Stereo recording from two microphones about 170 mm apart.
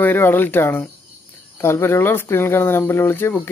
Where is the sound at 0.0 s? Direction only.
10° left (ahead or behind).